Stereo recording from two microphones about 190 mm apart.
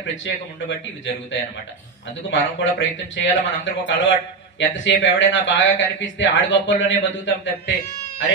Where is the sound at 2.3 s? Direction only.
75° left (ahead or behind).